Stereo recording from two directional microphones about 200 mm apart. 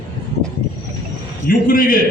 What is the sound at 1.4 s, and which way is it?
Speech, 45° left (ahead or behind).